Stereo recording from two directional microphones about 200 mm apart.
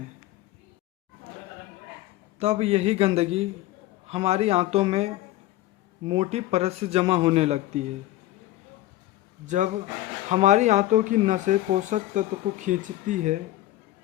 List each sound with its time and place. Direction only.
2.4 s speech: 30° right (ahead or behind)
4.1 s speech: 30° right (ahead or behind)
9.5 s speech: 40° right (ahead or behind)